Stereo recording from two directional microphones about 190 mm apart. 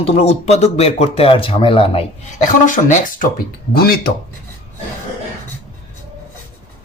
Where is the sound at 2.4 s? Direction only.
45° left (ahead or behind).